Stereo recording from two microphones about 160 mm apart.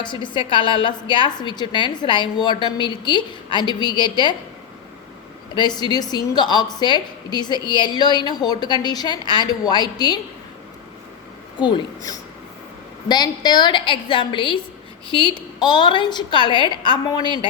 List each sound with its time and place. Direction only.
0.0 s a woman's voice: 30° left (ahead or behind)
5.5 s a woman's voice: 25° left (ahead or behind)
13.1 s a woman's voice: 25° left (ahead or behind)